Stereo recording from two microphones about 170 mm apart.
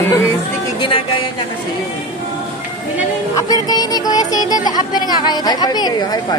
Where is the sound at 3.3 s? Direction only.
20° left (ahead or behind).